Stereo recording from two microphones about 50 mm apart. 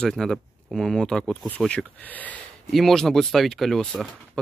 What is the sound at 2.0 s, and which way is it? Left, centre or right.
Speech, left.